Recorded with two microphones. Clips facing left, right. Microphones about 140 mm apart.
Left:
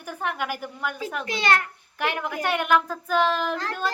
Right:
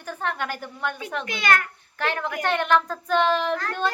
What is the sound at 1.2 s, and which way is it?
Speech, 30° left (ahead or behind).